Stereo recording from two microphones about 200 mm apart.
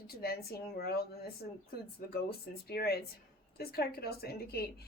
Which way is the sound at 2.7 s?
50° left (ahead or behind).